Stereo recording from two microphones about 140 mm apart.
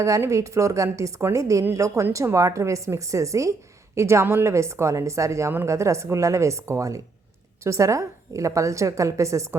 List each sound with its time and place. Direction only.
0.0 s a woman's voice: 25° right (ahead or behind)